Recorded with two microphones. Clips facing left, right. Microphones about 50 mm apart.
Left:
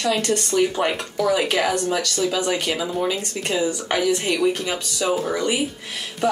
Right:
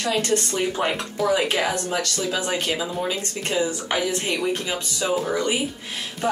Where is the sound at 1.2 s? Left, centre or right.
Centre.